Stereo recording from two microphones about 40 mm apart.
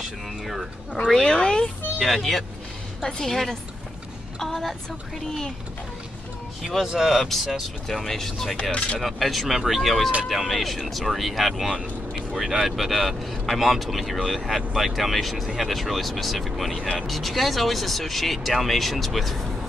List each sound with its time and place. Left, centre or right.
0.0 s speech: centre
1.2 s speech: centre
2.0 s speech: centre
3.0 s a woman's voice: centre
6.9 s speech: centre
7.9 s speech: centre
8.7 s speech: left
9.0 s speech: centre